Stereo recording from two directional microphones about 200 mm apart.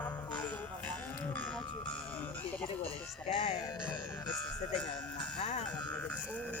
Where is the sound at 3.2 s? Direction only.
30° left (ahead or behind).